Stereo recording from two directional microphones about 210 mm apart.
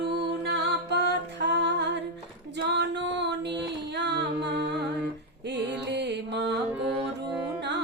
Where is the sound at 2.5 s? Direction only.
55° right (ahead or behind).